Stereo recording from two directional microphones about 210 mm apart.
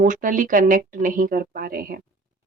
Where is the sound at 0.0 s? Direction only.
40° right (ahead or behind).